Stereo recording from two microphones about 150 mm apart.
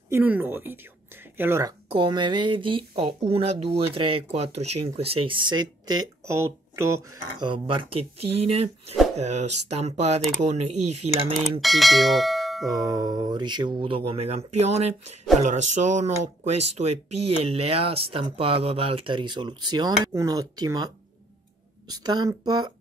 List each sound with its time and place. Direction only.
0.1 s speech: 10° right (ahead or behind)
1.9 s speech: 30° right (ahead or behind)
7.3 s speech: 35° right (ahead or behind)
11.6 s speech: centre (ahead or behind)
12.6 s speech: 25° right (ahead or behind)